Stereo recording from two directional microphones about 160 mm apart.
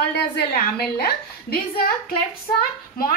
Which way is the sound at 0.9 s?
75° left (ahead or behind).